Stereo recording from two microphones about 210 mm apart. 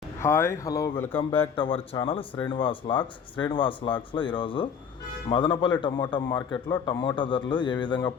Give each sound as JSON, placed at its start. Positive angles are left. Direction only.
{"t": 0.2, "sound": "speech", "side_deg": 15}
{"t": 1.5, "sound": "a man's voice", "side_deg": 25}